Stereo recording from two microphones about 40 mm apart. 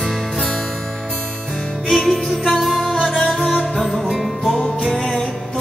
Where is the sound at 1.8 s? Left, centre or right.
Centre.